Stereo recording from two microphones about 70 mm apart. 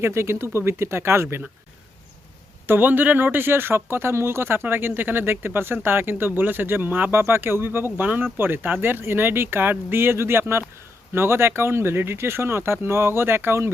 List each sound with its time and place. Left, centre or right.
0.0 s speech: right
2.6 s speech: right